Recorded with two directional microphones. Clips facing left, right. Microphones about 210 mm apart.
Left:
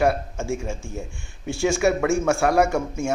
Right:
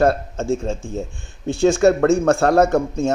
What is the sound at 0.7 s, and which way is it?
Speech, 20° right (ahead or behind).